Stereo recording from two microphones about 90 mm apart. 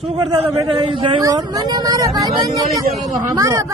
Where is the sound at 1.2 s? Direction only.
45° right (ahead or behind).